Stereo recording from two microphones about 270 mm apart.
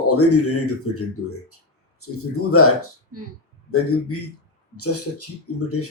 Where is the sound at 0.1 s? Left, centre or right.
Left.